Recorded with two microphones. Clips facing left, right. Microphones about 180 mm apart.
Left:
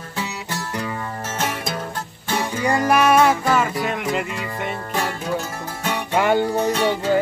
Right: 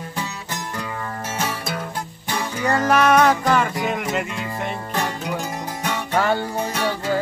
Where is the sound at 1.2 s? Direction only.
10° right (ahead or behind).